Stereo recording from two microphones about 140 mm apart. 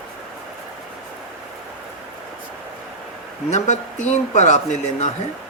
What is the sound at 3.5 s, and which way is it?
A man's voice, 55° left (ahead or behind).